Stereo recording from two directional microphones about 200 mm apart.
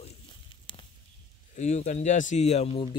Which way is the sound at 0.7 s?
25° left (ahead or behind).